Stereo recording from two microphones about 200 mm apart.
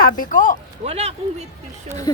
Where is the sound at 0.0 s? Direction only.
45° left (ahead or behind).